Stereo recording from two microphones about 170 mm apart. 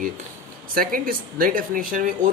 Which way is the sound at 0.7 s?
55° right (ahead or behind).